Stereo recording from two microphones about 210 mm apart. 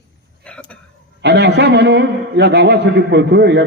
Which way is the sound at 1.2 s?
55° right (ahead or behind).